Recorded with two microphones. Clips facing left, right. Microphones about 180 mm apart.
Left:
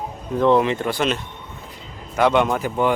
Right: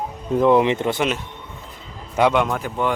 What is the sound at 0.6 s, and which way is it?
Speech, 20° right (ahead or behind).